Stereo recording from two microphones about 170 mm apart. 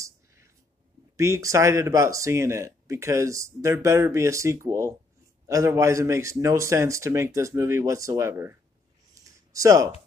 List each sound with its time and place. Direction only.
1.1 s speech: 15° right (ahead or behind)